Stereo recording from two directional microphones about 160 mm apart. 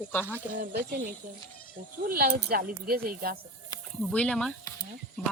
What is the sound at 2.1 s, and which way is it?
Speech, 70° right (ahead or behind).